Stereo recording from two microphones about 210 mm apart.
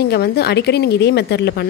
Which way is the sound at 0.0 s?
50° left (ahead or behind).